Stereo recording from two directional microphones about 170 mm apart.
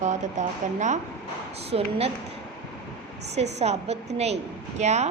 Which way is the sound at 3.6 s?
40° right (ahead or behind).